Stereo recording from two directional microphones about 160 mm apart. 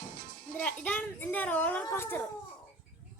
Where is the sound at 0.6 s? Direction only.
10° left (ahead or behind).